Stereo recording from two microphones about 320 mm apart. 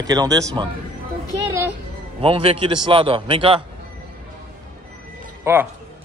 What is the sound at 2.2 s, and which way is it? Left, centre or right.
A man's voice, centre.